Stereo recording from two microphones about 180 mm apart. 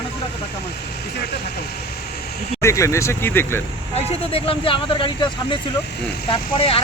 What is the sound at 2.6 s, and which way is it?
Speech, 15° left (ahead or behind).